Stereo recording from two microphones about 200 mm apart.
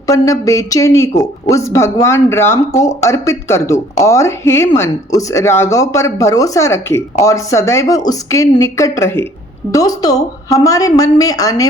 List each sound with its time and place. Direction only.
0.1 s a man's voice: 15° left (ahead or behind)